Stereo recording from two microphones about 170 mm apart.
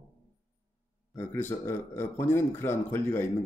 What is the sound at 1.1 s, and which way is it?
Speech, 15° left (ahead or behind).